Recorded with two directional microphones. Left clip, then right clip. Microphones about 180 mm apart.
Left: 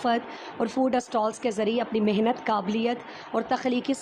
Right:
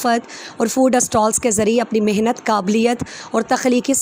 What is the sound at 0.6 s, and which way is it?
Speech, 25° right (ahead or behind).